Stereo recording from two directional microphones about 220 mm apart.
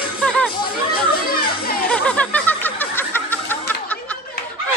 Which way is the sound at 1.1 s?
45° left (ahead or behind).